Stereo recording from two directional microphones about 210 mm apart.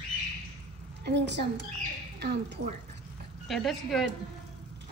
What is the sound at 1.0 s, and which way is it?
A woman's voice, 55° right (ahead or behind).